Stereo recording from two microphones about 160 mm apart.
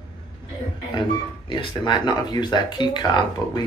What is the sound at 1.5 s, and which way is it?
Speech, 30° left (ahead or behind).